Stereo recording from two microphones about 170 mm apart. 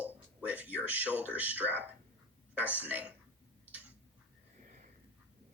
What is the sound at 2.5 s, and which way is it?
Speech, 10° right (ahead or behind).